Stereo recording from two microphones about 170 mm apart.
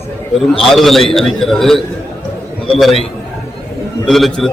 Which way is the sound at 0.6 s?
Centre (ahead or behind).